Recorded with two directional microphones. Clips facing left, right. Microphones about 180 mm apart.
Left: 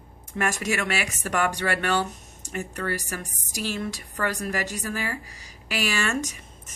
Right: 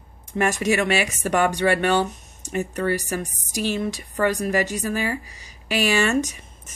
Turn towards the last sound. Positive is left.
turn(degrees=-20)  # may be behind; listen again after turning